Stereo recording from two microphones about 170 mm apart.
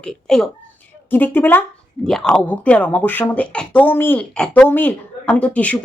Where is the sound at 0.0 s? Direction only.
5° left (ahead or behind).